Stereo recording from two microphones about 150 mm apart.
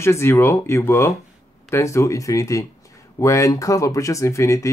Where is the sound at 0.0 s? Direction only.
15° left (ahead or behind).